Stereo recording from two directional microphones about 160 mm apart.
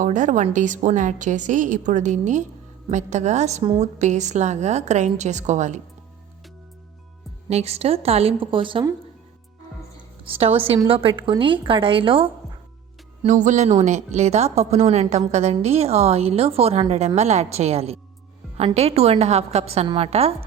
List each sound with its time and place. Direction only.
0.0 s a woman's voice: 50° right (ahead or behind)
7.5 s a woman's voice: 40° right (ahead or behind)
10.8 s a woman's voice: 35° right (ahead or behind)
13.2 s a woman's voice: 50° right (ahead or behind)